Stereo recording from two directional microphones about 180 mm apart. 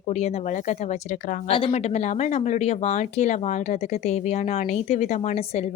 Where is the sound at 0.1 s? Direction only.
40° left (ahead or behind).